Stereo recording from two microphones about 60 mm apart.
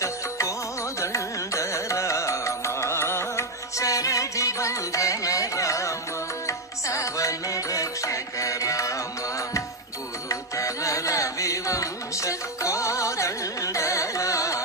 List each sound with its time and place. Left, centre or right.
0.0 s music: left
0.9 s carnatic music: left
3.8 s music: left
10.2 s music: left